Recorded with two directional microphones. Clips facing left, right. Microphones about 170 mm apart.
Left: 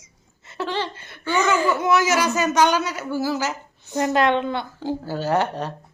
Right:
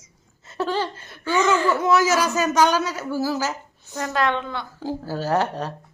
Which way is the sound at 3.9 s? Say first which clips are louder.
Left 4 dB; 20° left (ahead or behind).